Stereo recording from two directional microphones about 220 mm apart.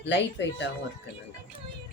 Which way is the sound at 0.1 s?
55° left (ahead or behind).